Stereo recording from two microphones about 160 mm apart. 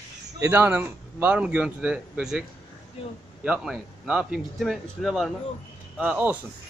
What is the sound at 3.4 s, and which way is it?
Speech, 5° right (ahead or behind).